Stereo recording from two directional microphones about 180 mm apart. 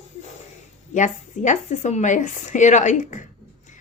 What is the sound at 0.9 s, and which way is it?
Speech, 45° left (ahead or behind).